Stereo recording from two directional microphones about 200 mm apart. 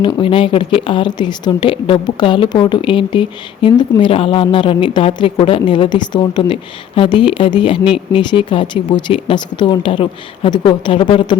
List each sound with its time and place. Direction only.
0.2 s a woman's voice: 25° left (ahead or behind)